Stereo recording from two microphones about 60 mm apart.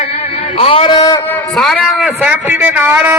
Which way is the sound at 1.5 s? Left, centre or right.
Centre.